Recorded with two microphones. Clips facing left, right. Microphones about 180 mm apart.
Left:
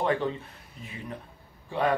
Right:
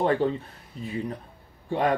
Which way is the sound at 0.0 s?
35° right (ahead or behind).